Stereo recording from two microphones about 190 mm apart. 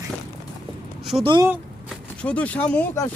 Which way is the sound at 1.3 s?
15° right (ahead or behind).